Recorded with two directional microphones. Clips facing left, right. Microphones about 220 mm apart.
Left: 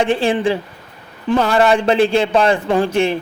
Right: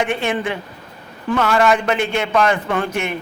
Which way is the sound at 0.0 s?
30° left (ahead or behind).